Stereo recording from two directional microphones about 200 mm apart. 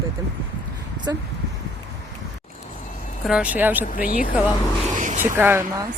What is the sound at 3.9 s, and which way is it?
Speech, 45° left (ahead or behind).